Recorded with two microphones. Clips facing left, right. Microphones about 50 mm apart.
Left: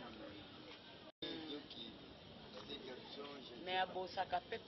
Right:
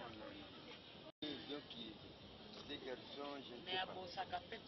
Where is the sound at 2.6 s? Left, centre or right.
Right.